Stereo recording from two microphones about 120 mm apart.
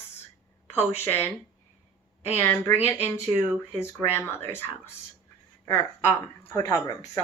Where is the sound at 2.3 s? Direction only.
15° left (ahead or behind).